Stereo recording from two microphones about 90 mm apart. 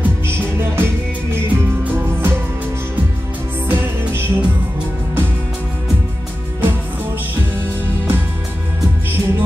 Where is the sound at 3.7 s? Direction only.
25° right (ahead or behind).